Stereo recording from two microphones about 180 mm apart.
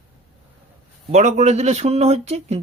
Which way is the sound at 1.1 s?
40° right (ahead or behind).